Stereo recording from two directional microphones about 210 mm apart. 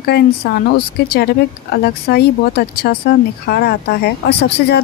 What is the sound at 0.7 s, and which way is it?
A woman's voice, 50° left (ahead or behind).